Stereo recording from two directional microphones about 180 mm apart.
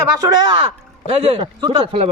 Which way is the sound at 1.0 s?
30° right (ahead or behind).